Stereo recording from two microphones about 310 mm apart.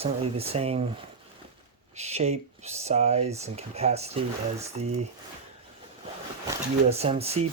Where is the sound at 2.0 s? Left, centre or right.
Right.